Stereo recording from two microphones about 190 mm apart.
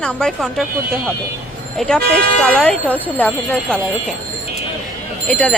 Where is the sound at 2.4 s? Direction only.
5° left (ahead or behind).